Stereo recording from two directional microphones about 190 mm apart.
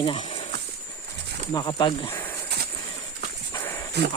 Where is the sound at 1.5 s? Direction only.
20° left (ahead or behind).